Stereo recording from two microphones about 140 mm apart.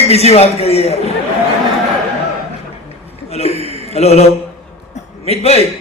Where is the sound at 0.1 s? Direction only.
50° left (ahead or behind).